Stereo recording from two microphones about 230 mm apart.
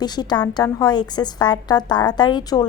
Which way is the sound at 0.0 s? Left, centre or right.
Centre.